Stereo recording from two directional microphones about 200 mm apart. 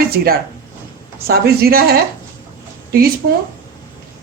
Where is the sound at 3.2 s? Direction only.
55° right (ahead or behind).